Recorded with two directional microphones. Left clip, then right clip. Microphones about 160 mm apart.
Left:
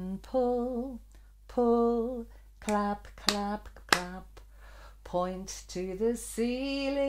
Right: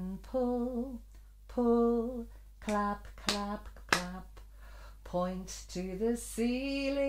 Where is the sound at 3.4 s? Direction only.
30° left (ahead or behind).